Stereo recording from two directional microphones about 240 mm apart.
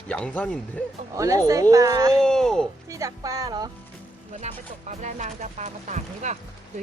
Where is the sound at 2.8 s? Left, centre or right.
Centre.